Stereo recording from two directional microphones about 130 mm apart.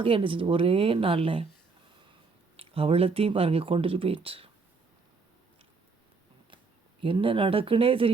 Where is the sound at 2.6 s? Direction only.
45° right (ahead or behind).